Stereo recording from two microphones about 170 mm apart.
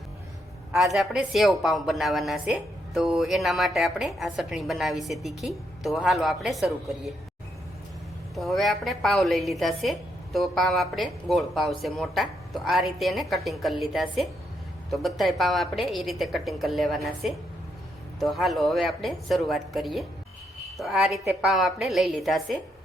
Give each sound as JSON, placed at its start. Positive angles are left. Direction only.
{"t": 0.7, "sound": "a woman's voice", "side_deg": 0}
{"t": 8.4, "sound": "a woman's voice", "side_deg": 0}